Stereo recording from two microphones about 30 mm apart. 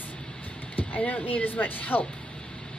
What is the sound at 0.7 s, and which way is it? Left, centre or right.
Speech, left.